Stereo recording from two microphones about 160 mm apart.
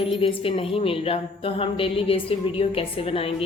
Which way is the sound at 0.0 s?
35° left (ahead or behind).